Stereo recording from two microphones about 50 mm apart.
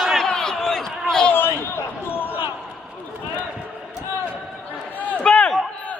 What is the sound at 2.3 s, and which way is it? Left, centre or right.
Basketball bounce, right.